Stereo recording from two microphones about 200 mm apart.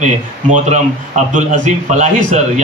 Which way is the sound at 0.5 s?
35° right (ahead or behind).